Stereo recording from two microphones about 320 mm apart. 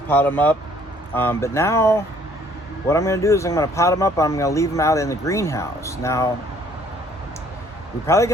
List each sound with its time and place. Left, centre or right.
0.1 s speech: centre
8.0 s speech: centre